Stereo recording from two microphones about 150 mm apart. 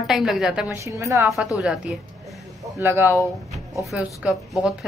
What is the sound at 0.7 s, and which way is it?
Speech, 20° right (ahead or behind).